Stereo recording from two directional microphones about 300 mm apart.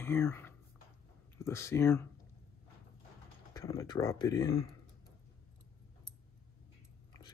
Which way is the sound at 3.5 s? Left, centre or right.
Centre.